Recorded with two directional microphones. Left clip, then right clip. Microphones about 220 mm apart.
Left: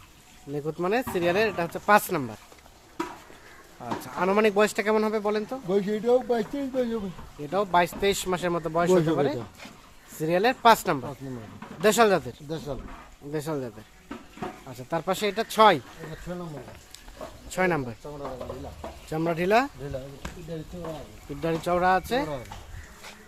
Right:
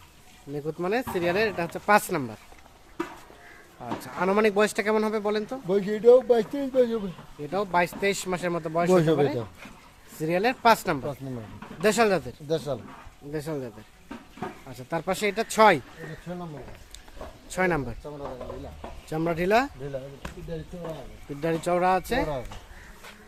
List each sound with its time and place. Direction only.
0.5 s speech: 10° left (ahead or behind)
3.8 s speech: centre (ahead or behind)
5.6 s speech: 40° right (ahead or behind)
7.5 s speech: 5° left (ahead or behind)
8.9 s speech: 50° right (ahead or behind)
9.1 s speech: 5° left (ahead or behind)
12.5 s speech: 50° right (ahead or behind)
13.3 s speech: 10° left (ahead or behind)
14.7 s speech: centre (ahead or behind)
17.5 s speech: centre (ahead or behind)
19.0 s speech: centre (ahead or behind)
21.4 s speech: 5° right (ahead or behind)